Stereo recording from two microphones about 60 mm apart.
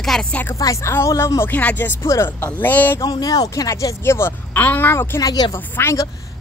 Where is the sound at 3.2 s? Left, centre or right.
Left.